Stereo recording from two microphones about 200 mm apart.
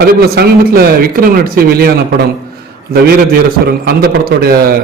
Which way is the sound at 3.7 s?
50° right (ahead or behind).